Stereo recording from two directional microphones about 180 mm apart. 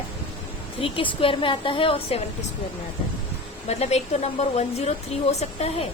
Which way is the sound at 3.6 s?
35° left (ahead or behind).